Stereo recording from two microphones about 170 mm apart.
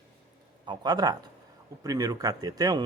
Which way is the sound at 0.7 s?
25° right (ahead or behind).